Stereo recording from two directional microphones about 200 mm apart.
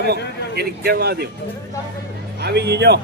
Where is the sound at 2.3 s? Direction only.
55° right (ahead or behind).